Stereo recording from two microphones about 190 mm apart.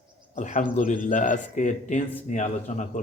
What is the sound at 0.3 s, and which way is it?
A man's voice, 40° left (ahead or behind).